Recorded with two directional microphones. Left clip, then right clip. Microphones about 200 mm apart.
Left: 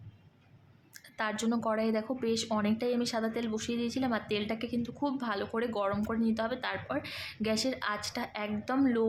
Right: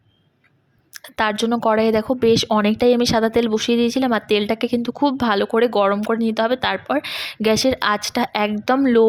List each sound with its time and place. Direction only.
0.9 s a woman's voice: 45° right (ahead or behind)